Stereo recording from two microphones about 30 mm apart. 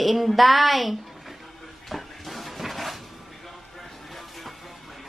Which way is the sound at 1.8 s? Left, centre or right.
Centre.